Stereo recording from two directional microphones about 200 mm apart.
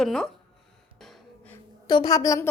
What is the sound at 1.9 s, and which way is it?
Speech, 20° left (ahead or behind).